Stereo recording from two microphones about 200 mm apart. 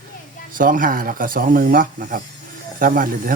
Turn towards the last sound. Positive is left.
turn(degrees=-45)  # may be behind; listen again after turning